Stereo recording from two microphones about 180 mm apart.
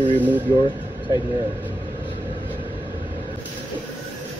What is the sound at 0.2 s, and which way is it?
Speech, 10° right (ahead or behind).